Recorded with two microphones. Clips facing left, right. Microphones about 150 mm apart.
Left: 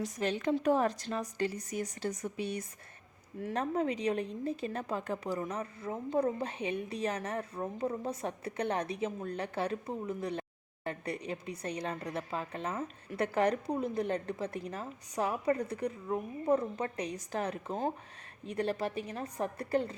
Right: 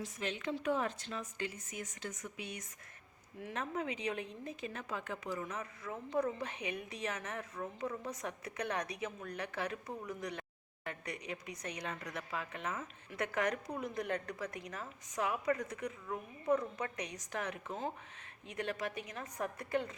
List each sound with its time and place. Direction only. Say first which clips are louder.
0.0 s a woman's voice: left 7 dB; 40° left (ahead or behind)